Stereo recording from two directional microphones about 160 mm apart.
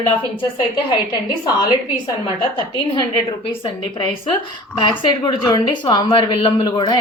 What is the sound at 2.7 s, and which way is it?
A woman's voice, 30° left (ahead or behind).